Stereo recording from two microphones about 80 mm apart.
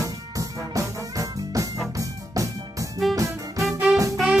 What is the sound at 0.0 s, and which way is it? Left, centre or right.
Music, right.